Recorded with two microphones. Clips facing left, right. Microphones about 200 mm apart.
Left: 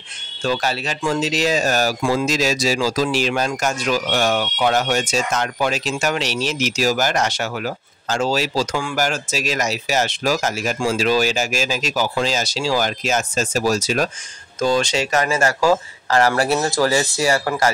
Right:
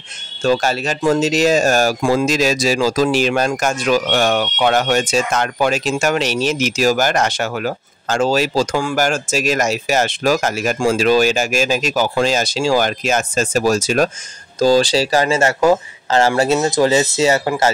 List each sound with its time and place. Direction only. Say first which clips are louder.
0.4 s speech: right 5 dB; 45° right (ahead or behind)
14.6 s speech: right 5 dB; 35° right (ahead or behind)